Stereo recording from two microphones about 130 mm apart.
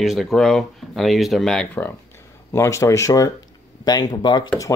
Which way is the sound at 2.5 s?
25° left (ahead or behind).